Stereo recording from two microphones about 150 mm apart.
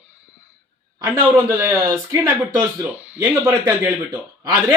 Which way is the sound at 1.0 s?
15° right (ahead or behind).